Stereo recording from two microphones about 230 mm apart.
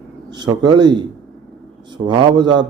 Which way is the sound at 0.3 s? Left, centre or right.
Centre.